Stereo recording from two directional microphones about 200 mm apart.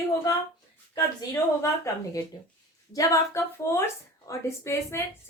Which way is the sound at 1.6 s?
15° left (ahead or behind).